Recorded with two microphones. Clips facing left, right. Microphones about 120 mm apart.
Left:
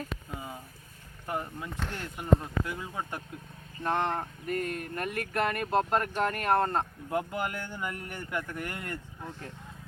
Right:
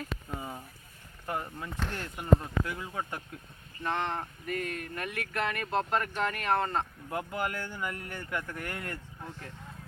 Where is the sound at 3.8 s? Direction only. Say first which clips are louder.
Left 3 dB; 45° left (ahead or behind).